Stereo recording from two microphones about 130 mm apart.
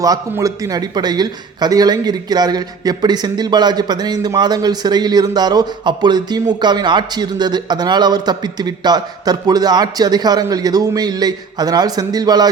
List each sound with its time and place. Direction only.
0.0 s a man's voice: 25° right (ahead or behind)